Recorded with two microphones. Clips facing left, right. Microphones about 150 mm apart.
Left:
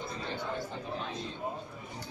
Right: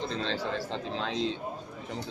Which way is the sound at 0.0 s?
90° right.